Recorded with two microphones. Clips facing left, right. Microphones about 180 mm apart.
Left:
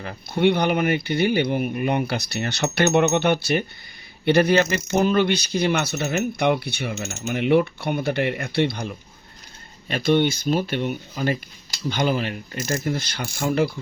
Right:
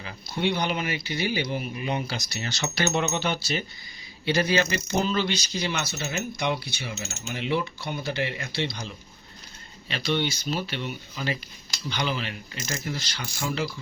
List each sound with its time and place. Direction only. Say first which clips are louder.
0.0 s speech: left 8 dB; 55° left (ahead or behind)
9.9 s speech: left 8 dB; 50° left (ahead or behind)